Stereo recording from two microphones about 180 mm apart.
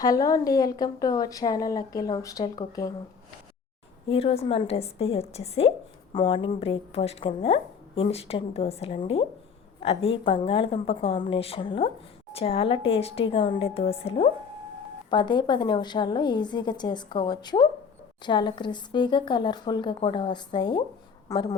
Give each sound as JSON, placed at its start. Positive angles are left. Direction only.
{"t": 0.0, "sound": "a woman's voice", "side_deg": 20}
{"t": 4.1, "sound": "a woman's voice", "side_deg": 30}